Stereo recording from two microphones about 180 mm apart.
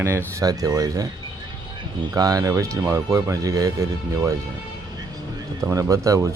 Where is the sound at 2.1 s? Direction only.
20° right (ahead or behind).